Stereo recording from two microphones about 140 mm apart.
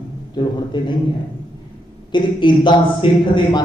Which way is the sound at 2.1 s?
35° left (ahead or behind).